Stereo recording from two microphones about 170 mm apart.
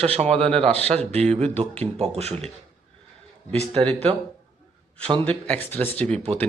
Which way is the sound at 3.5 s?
35° right (ahead or behind).